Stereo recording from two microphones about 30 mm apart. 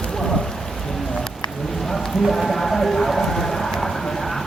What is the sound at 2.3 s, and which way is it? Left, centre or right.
Music, centre.